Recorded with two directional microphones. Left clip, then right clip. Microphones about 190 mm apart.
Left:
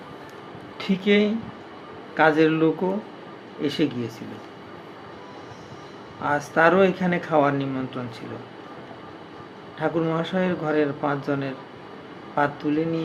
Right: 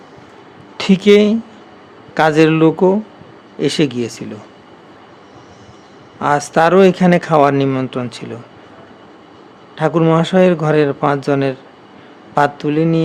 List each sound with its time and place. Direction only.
0.8 s speech: 60° right (ahead or behind)
6.2 s speech: 60° right (ahead or behind)
9.7 s speech: 60° right (ahead or behind)